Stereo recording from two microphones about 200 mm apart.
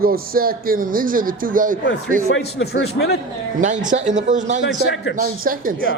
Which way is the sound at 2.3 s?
70° left (ahead or behind).